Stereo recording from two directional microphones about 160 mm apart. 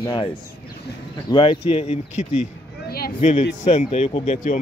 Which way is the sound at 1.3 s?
30° left (ahead or behind).